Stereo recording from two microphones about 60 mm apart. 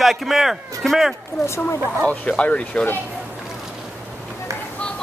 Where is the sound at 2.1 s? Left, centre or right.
Left.